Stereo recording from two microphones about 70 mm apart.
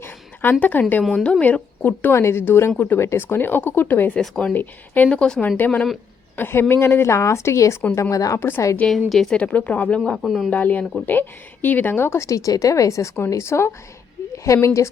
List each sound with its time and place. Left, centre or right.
0.6 s speech: left
2.1 s a woman's voice: left
4.2 s speech: centre
4.5 s speech: left
5.0 s a woman's voice: centre; by 8.4 s left
8.4 s a woman's voice: left
9.0 s speech: centre
9.4 s speech: left
10.2 s speech: centre
10.5 s speech: left
12.2 s a woman's voice: left